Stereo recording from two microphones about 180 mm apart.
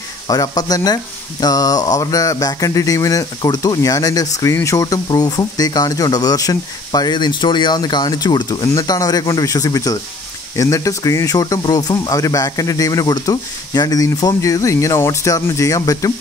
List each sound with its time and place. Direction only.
0.3 s speech: 20° left (ahead or behind)